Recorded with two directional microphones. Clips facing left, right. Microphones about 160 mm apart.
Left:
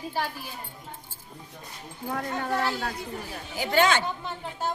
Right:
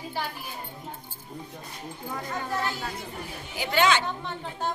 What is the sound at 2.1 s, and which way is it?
Speech, 65° left (ahead or behind).